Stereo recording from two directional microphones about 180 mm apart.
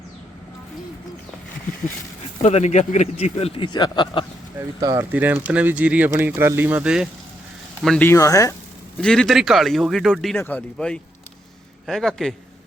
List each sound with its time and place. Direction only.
2.4 s a man's voice: 40° left (ahead or behind)
4.8 s speech: 20° right (ahead or behind)
5.1 s speech: 10° right (ahead or behind); by 8.5 s 15° left (ahead or behind)
9.0 s speech: 5° left (ahead or behind)